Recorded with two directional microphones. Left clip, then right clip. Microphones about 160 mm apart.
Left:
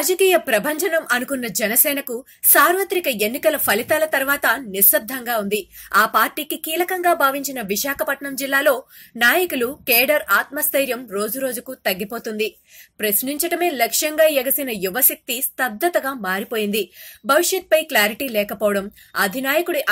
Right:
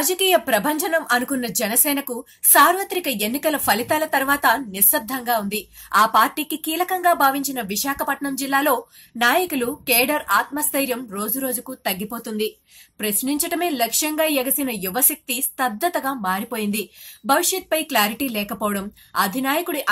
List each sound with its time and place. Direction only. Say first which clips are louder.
0.0 s a woman's voice: left 2 dB; 5° left (ahead or behind); by 12.5 s 25° left (ahead or behind)
13.0 s a woman's voice: left 2 dB; 10° left (ahead or behind)